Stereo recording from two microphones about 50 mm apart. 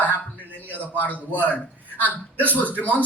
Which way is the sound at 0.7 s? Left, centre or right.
Left.